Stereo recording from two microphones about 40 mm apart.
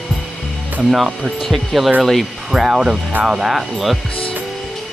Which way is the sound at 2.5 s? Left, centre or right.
Centre.